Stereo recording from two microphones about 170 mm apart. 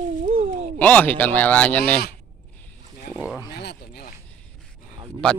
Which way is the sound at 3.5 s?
70° left (ahead or behind).